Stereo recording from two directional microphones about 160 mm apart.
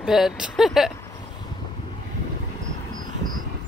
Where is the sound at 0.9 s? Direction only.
25° left (ahead or behind).